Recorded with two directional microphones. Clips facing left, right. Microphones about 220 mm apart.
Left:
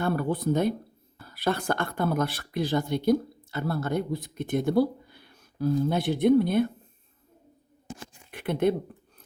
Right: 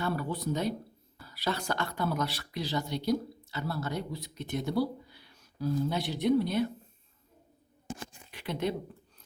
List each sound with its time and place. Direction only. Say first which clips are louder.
0.0 s speech: left 6 dB; 50° left (ahead or behind)
8.3 s speech: left 8 dB; 55° left (ahead or behind)